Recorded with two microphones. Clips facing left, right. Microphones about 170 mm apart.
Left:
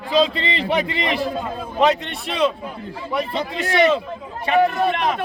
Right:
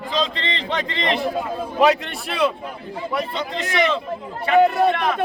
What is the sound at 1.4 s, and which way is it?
A man's voice, 5° right (ahead or behind).